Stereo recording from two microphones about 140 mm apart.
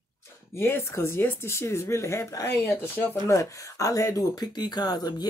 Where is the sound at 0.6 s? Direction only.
15° left (ahead or behind).